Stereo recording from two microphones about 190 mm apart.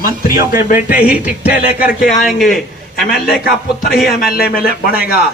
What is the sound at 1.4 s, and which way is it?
Speech, 50° left (ahead or behind).